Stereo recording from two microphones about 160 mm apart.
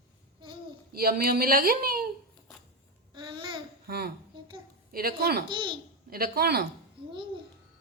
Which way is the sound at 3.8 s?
75° right (ahead or behind).